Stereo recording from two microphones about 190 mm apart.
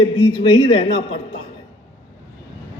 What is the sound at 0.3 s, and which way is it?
Speech, 25° left (ahead or behind).